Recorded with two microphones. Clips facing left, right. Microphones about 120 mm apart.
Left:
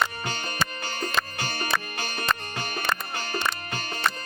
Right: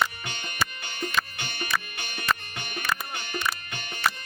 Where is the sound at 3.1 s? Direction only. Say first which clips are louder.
Left 3 dB; 35° left (ahead or behind).